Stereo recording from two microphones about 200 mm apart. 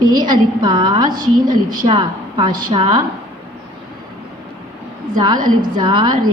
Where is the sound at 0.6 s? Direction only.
20° right (ahead or behind).